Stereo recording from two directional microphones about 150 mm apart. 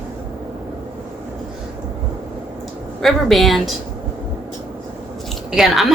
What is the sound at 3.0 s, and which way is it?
Speech, centre (ahead or behind).